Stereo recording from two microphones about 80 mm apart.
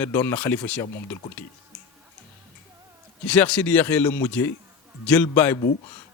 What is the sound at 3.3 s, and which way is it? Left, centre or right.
A man's voice, centre.